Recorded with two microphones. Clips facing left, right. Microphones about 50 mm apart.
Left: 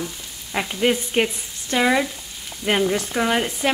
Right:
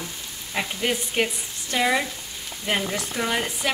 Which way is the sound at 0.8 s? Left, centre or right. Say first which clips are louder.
Left 6 dB; left.